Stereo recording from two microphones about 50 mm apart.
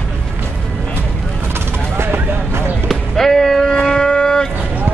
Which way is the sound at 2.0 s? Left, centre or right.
Right.